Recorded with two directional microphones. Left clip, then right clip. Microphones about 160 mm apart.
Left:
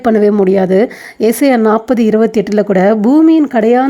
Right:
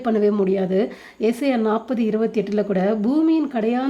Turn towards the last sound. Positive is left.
turn(degrees=55)  # may be behind; listen again after turning